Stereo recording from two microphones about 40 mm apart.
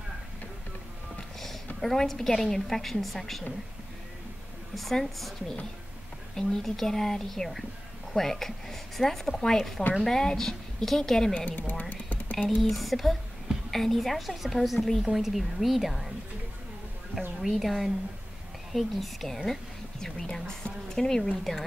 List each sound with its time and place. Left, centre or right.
1.8 s a woman's voice: centre
4.7 s a woman's voice: centre
6.3 s speech: centre
11.3 s speech: left
11.9 s computer keyboard: left
12.4 s a woman's voice: centre
17.4 s a woman's voice: centre
20.6 s a sound: centre